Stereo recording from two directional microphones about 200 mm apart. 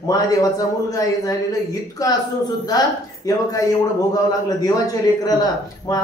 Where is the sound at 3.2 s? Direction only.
15° left (ahead or behind).